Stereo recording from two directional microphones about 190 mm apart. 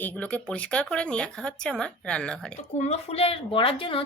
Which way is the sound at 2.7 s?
35° left (ahead or behind).